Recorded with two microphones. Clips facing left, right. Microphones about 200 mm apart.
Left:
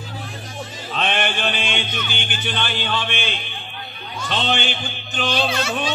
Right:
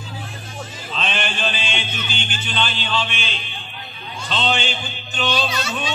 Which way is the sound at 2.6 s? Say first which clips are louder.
Right 3 dB; 60° left (ahead or behind).